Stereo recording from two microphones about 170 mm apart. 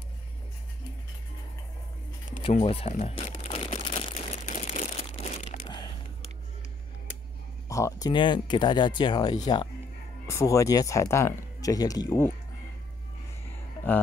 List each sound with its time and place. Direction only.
2.6 s speech: 35° left (ahead or behind)
3.4 s crumpling: 30° left (ahead or behind)
7.6 s speech: 20° left (ahead or behind)